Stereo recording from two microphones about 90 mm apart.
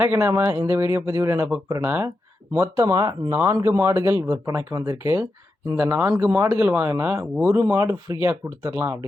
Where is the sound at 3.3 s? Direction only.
25° right (ahead or behind).